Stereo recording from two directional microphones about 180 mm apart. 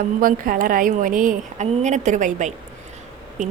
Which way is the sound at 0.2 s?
50° right (ahead or behind).